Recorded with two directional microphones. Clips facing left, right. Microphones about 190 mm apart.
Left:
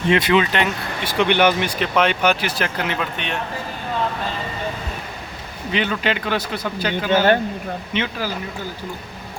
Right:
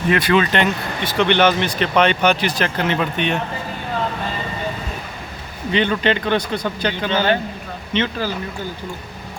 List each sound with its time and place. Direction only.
0.1 s speech: 20° left (ahead or behind)
0.5 s speech: 10° left (ahead or behind)
5.7 s speech: 5° left (ahead or behind)